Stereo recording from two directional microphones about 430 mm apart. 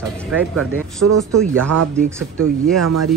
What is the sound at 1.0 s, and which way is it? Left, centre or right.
Speech, right.